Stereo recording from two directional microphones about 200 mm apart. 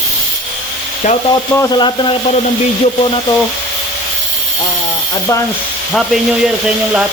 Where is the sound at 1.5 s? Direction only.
20° left (ahead or behind).